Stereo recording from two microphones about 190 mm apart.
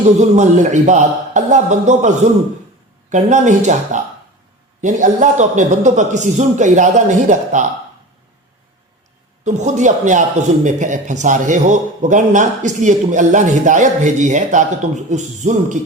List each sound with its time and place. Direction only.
0.2 s a man's voice: 40° right (ahead or behind)
9.4 s a man's voice: 40° right (ahead or behind)